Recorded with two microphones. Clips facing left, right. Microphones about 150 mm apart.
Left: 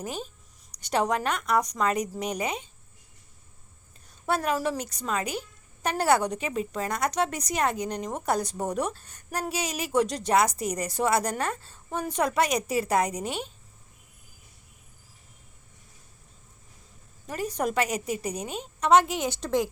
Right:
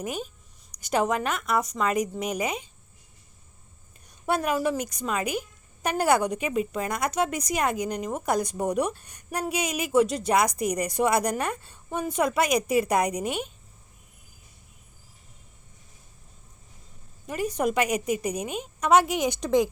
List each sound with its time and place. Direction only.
0.0 s a woman's voice: 15° right (ahead or behind)
4.3 s a woman's voice: 15° right (ahead or behind)
10.5 s speech: 30° left (ahead or behind)
10.8 s a woman's voice: 15° right (ahead or behind)
12.6 s a woman's voice: 30° left (ahead or behind)
12.9 s a woman's voice: 15° right (ahead or behind)
17.2 s a woman's voice: 10° right (ahead or behind)